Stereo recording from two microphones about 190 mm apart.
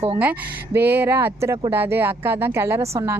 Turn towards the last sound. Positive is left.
turn(degrees=-15)  # may be behind; listen again after turning